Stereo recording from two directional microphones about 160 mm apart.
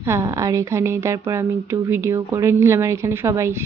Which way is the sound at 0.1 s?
20° right (ahead or behind).